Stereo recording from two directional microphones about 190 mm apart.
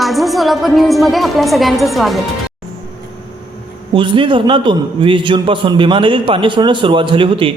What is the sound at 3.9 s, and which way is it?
A man's voice, 25° right (ahead or behind).